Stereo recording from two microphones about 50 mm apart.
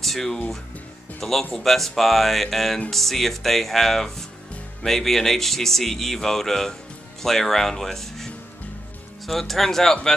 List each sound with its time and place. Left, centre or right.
0.0 s speech: centre
1.5 s speech: centre